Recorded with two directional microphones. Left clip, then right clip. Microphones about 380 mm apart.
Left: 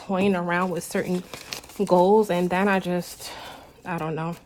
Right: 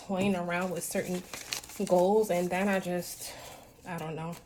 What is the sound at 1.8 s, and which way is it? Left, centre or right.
Speech, left.